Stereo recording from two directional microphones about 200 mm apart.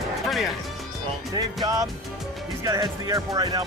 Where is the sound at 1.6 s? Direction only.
15° right (ahead or behind).